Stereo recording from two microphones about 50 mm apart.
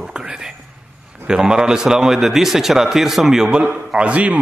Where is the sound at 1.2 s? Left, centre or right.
Centre.